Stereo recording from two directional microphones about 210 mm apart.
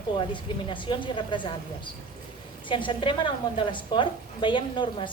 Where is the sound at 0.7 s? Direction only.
25° left (ahead or behind).